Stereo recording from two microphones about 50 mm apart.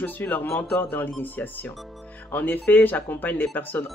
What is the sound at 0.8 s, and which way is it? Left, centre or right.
Speech, left.